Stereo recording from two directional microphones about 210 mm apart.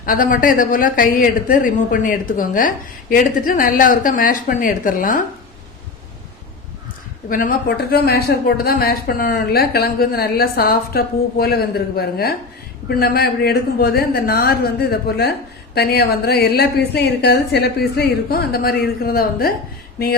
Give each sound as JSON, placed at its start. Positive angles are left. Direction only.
{"t": 0.0, "sound": "a woman's voice", "side_deg": 40}
{"t": 7.3, "sound": "a man's voice", "side_deg": 40}